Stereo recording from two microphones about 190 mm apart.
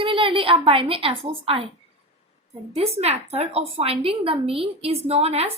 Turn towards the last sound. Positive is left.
turn(degrees=-30)  # may be behind; listen again after turning